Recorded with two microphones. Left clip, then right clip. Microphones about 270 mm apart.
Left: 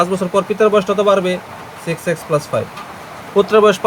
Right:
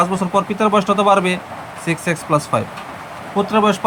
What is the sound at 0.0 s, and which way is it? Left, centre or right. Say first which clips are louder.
Speech: left 1 dB; centre.